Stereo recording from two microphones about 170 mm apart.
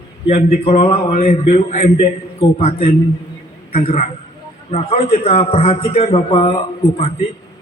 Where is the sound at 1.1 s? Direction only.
50° left (ahead or behind).